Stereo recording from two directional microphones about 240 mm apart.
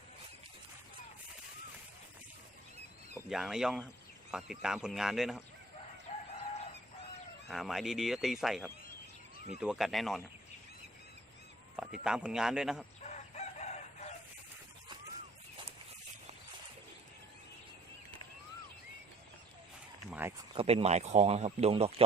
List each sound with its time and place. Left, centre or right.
3.2 s speech: centre
6.1 s chicken: left
7.4 s speech: centre
11.8 s speech: centre
13.0 s chicken: left
20.1 s a sound: centre
20.5 s speech: right